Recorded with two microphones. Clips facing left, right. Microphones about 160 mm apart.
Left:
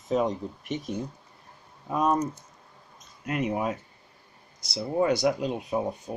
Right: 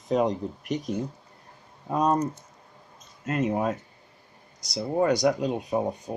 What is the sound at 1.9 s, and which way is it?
Speech, 25° right (ahead or behind).